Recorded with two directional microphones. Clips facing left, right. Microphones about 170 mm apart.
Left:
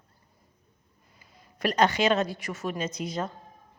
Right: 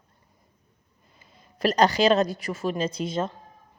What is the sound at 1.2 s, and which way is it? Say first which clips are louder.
A woman's voice: right 4 dB; 35° right (ahead or behind).